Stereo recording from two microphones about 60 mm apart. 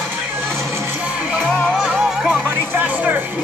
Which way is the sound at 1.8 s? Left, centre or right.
Centre.